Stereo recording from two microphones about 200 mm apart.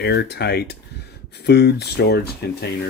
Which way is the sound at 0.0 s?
55° left (ahead or behind).